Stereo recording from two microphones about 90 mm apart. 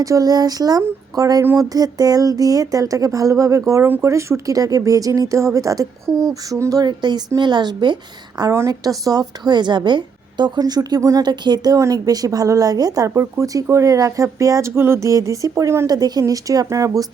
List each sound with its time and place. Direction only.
0.0 s a woman's voice: 40° right (ahead or behind)
3.8 s speech: 20° right (ahead or behind)
4.1 s a woman's voice: 35° right (ahead or behind); by 7.9 s 55° right (ahead or behind)
8.5 s a woman's voice: 40° right (ahead or behind)
11.3 s a woman's voice: 55° right (ahead or behind); by 15.9 s 35° right (ahead or behind)
15.9 s speech: 45° right (ahead or behind)